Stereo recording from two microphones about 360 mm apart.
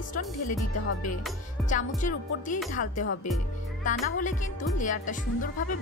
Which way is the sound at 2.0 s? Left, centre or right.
Left.